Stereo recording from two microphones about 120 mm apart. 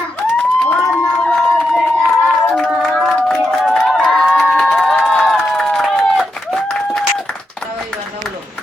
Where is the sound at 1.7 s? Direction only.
Centre (ahead or behind).